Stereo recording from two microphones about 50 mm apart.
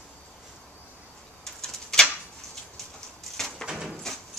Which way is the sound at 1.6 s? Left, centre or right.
Centre.